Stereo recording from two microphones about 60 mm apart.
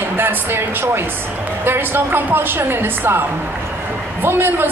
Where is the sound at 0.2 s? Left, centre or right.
Right.